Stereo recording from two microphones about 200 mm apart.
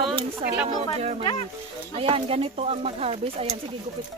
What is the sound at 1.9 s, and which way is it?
Speech, 30° right (ahead or behind).